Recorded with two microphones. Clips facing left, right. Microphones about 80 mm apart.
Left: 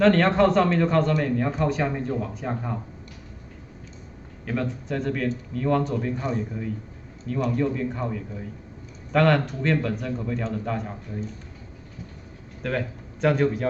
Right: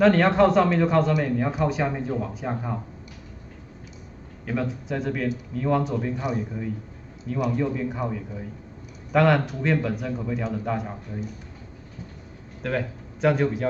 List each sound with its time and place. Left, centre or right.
0.0 s a man's voice: centre
4.5 s a man's voice: centre
12.6 s a man's voice: centre